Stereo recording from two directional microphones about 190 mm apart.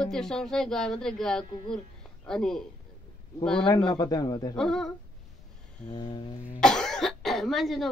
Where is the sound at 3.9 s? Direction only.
20° left (ahead or behind).